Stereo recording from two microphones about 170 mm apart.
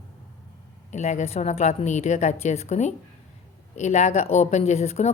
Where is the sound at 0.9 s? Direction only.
45° left (ahead or behind).